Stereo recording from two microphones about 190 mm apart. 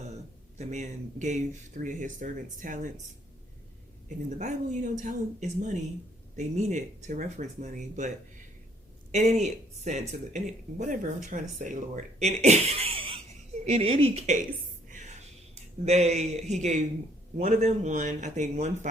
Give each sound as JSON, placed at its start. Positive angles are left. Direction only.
{"t": 0.6, "sound": "speech", "side_deg": -40}
{"t": 4.4, "sound": "speech", "side_deg": -40}
{"t": 9.1, "sound": "speech", "side_deg": -35}
{"t": 15.5, "sound": "speech", "side_deg": -35}